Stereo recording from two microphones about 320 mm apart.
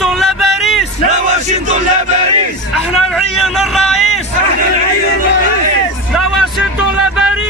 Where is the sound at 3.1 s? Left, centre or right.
Centre.